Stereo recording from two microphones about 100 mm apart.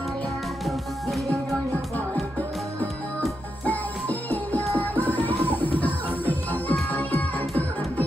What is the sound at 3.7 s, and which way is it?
Music, 15° left (ahead or behind).